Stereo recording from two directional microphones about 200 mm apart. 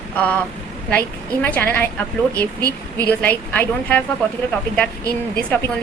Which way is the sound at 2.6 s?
20° right (ahead or behind).